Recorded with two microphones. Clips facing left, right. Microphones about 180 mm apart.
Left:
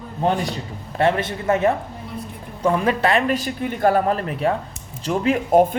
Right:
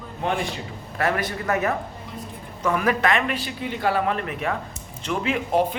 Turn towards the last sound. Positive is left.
turn(degrees=50)  # may be behind; listen again after turning